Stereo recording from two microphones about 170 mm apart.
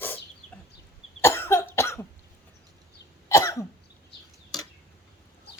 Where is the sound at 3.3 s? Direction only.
15° left (ahead or behind).